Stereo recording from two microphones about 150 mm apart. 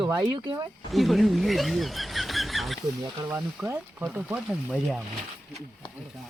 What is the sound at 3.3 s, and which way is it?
Speech, 10° right (ahead or behind).